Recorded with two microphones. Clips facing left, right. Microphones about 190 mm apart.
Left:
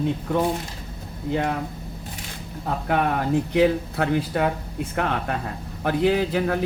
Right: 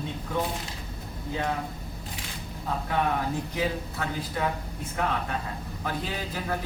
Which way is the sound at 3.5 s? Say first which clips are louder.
Left 13 dB; 70° left (ahead or behind).